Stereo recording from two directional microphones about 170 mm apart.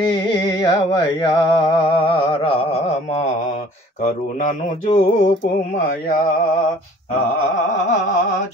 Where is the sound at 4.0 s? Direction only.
50° left (ahead or behind).